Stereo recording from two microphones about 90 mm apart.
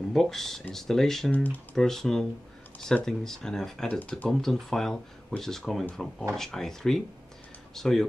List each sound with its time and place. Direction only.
0.1 s speech: 5° left (ahead or behind)
1.3 s speech: 20° left (ahead or behind)
1.8 s speech: 5° left (ahead or behind)
3.9 s speech: 15° left (ahead or behind)
4.3 s speech: 5° left (ahead or behind)